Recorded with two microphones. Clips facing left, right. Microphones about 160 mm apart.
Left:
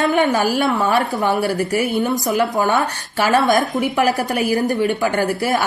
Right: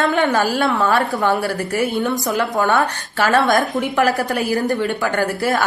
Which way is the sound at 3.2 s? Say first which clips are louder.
Even; 5° left (ahead or behind).